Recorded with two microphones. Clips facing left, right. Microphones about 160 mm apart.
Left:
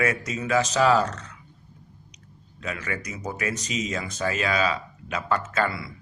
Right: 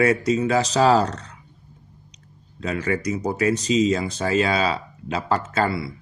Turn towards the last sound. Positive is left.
turn(degrees=-30)  # may be behind; listen again after turning